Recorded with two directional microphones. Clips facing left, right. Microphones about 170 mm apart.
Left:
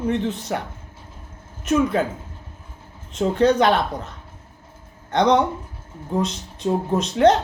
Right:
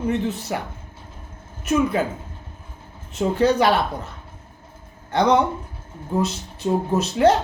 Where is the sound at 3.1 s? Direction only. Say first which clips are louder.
Left 1 dB; 5° right (ahead or behind).